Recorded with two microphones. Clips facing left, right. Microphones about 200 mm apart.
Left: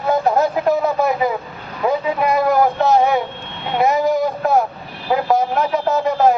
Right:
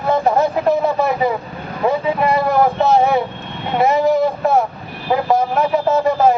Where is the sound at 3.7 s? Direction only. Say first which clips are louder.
Right 2 dB; centre (ahead or behind).